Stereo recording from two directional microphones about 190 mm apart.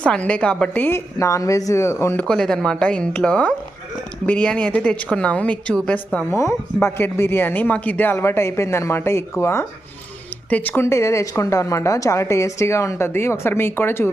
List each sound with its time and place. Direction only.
0.0 s a woman's voice: 5° left (ahead or behind)
2.2 s a woman's voice: 5° left (ahead or behind)